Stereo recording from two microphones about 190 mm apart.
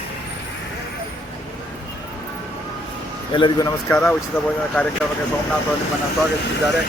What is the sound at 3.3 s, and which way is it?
Speech, 25° left (ahead or behind).